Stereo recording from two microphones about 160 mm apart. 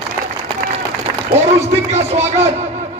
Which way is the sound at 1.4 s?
45° right (ahead or behind).